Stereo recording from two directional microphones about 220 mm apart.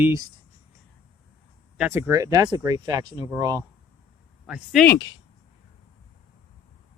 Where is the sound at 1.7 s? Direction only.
5° right (ahead or behind).